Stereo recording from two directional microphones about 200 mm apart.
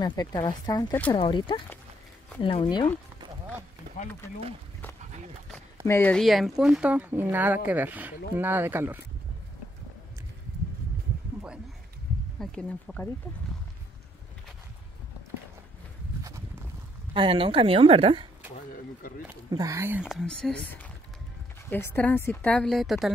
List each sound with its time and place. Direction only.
0.0 s speech: 20° left (ahead or behind)
5.9 s speech: 10° left (ahead or behind); by 9.0 s 10° right (ahead or behind)
12.4 s speech: 5° left (ahead or behind)
16.3 s a sound: 15° right (ahead or behind)
17.1 s speech: 25° right (ahead or behind)
19.5 s speech: 15° right (ahead or behind); by 23.1 s centre (ahead or behind)